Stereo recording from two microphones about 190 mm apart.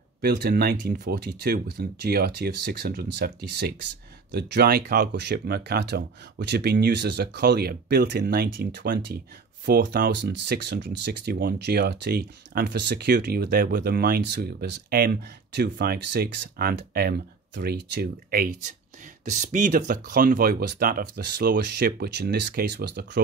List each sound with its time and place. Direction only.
0.2 s speech: 60° right (ahead or behind)
19.3 s speech: 40° right (ahead or behind); by 23.2 s 60° right (ahead or behind)